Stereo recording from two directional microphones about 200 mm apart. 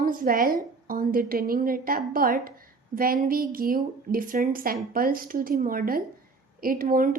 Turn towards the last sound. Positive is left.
turn(degrees=-45)  # may be behind; listen again after turning